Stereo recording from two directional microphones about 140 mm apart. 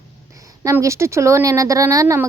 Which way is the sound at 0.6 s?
20° right (ahead or behind).